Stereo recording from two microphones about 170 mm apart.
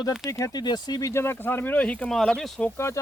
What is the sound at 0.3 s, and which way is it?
Speech, 20° left (ahead or behind).